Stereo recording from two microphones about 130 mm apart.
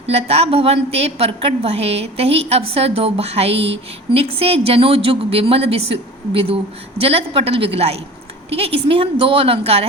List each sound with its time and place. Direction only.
0.1 s a woman's voice: 50° right (ahead or behind)